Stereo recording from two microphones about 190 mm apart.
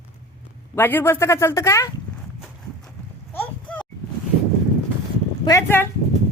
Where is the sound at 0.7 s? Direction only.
10° left (ahead or behind).